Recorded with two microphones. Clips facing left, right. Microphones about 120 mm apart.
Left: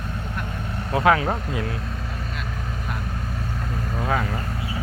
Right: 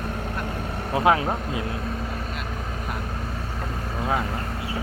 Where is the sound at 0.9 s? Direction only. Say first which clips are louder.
Left 1 dB; 20° right (ahead or behind).